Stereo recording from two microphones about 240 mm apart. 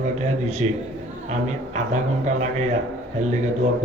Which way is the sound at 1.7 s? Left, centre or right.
Right.